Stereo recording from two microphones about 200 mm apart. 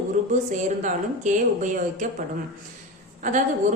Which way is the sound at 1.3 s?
35° right (ahead or behind).